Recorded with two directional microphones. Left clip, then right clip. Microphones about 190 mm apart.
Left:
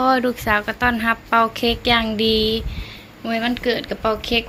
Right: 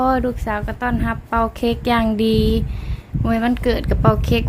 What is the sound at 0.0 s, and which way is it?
A woman's voice, 20° right (ahead or behind).